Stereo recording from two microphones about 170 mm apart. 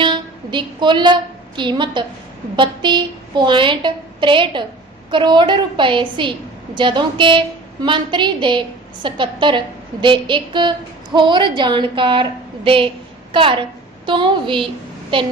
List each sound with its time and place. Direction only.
0.0 s a woman's voice: 30° right (ahead or behind)